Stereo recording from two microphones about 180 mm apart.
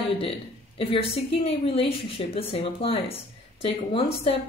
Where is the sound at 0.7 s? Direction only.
30° left (ahead or behind).